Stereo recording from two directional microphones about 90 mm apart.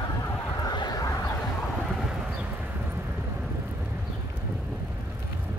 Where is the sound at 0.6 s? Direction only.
50° left (ahead or behind).